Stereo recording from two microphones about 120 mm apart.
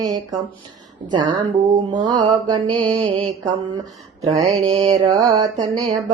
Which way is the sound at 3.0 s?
45° right (ahead or behind).